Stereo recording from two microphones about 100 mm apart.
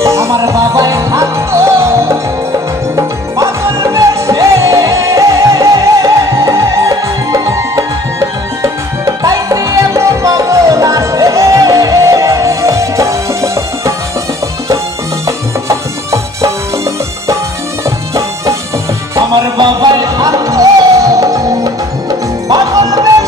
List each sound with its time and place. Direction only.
0.0 s music: 30° right (ahead or behind)
15.2 s music: 30° right (ahead or behind)
19.5 s music: 45° right (ahead or behind)